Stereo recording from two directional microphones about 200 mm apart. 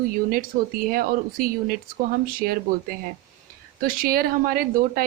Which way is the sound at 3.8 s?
45° right (ahead or behind).